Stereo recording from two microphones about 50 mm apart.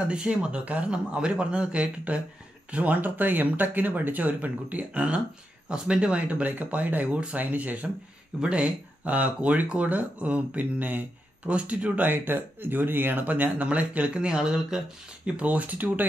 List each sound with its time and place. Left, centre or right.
0.0 s speech: right
12.0 s speech: right